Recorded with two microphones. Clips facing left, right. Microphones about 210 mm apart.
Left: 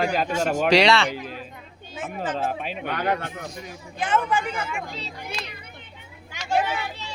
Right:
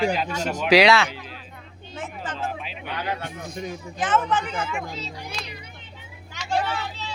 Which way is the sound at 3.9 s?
10° left (ahead or behind).